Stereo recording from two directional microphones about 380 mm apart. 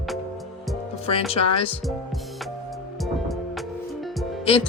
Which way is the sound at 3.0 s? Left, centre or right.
Centre.